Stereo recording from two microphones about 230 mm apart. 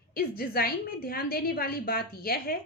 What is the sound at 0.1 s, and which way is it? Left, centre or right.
A woman's voice, left.